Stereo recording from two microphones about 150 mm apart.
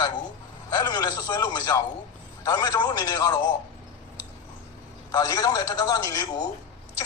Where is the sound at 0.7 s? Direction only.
25° left (ahead or behind).